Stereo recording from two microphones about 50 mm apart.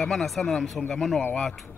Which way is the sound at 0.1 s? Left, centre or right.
Centre.